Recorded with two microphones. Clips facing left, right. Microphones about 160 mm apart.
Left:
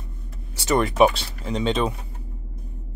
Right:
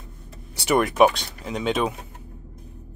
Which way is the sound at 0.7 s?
5° right (ahead or behind).